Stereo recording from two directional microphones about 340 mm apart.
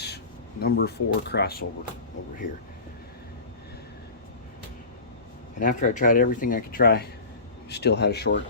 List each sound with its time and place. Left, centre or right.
0.6 s speech: left
5.5 s speech: left